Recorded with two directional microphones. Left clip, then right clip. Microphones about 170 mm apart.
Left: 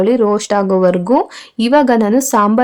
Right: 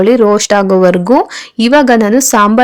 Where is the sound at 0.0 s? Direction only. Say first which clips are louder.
Right 5 dB; 20° right (ahead or behind).